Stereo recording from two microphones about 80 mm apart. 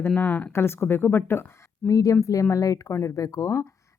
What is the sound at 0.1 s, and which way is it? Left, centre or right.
Speech, left.